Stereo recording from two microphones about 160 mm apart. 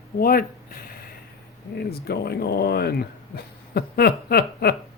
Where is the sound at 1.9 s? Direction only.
75° left (ahead or behind).